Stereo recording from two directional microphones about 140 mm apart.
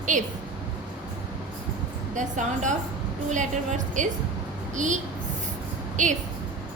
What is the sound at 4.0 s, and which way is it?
A woman's voice, 60° right (ahead or behind).